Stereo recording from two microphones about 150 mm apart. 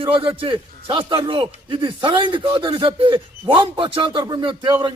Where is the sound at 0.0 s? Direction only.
35° right (ahead or behind).